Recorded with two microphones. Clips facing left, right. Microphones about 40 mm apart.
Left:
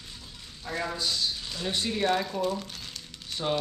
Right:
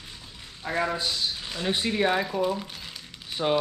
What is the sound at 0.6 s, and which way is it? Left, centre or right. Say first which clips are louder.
Speech: right 5 dB; right.